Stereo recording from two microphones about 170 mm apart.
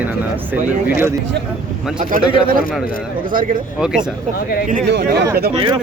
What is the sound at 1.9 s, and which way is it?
Speech, 50° right (ahead or behind).